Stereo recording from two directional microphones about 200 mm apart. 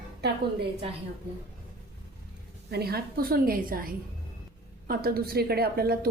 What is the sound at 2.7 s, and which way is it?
A woman's voice, 50° right (ahead or behind).